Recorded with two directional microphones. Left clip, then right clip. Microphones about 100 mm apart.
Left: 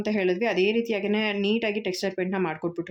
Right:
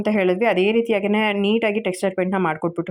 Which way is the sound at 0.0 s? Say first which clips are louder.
Right 6 dB; 40° right (ahead or behind).